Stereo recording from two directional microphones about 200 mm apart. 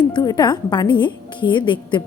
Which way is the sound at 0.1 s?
20° left (ahead or behind).